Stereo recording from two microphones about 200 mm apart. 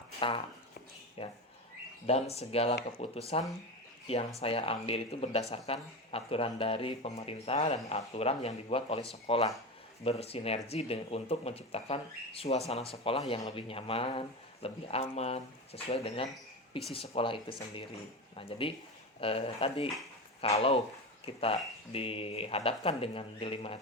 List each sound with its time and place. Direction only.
0.2 s speech: 25° left (ahead or behind)